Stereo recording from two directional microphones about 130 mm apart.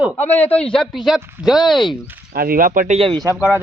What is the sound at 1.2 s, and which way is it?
Speech, 15° right (ahead or behind).